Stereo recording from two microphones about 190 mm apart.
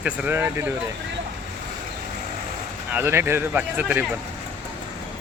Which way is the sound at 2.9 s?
15° right (ahead or behind).